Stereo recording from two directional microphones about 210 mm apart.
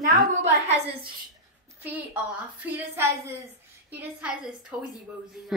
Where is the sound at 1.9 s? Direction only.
10° right (ahead or behind).